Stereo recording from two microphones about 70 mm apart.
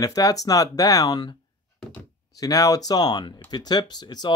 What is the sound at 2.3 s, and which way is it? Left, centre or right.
Speech, left.